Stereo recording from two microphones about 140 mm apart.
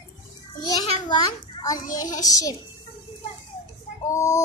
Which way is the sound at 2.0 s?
25° left (ahead or behind).